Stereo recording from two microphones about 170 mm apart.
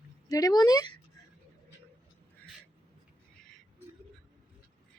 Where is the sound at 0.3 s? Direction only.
20° left (ahead or behind).